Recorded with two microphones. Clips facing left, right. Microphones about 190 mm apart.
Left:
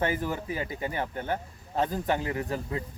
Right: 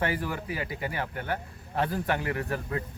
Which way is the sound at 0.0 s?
20° left (ahead or behind).